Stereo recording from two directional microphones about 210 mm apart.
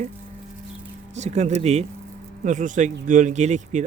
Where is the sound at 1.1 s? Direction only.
35° right (ahead or behind).